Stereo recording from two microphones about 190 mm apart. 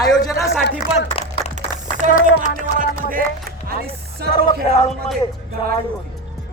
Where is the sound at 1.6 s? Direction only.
40° right (ahead or behind).